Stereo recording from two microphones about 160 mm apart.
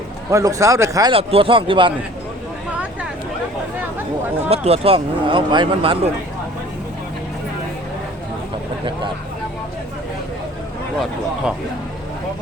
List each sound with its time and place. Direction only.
0.3 s speech: 20° right (ahead or behind)
1.1 s speech: 35° right (ahead or behind)
4.4 s speech: 40° right (ahead or behind)